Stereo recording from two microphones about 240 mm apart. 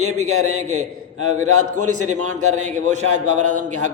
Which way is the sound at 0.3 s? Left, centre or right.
Right.